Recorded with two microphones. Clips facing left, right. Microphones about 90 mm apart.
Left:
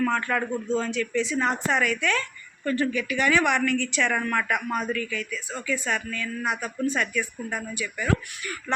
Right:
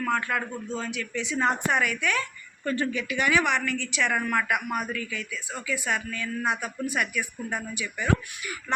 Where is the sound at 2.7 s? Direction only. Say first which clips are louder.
Left 2 dB; 20° right (ahead or behind).